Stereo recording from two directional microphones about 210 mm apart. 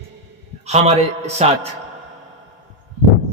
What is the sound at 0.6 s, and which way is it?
A man's voice, 30° right (ahead or behind).